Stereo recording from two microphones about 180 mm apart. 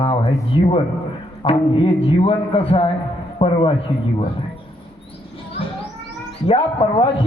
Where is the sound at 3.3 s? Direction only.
30° left (ahead or behind).